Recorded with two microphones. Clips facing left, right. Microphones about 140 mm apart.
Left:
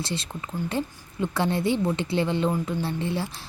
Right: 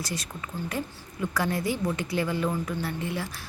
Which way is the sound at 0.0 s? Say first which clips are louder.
Left 3 dB; 25° left (ahead or behind).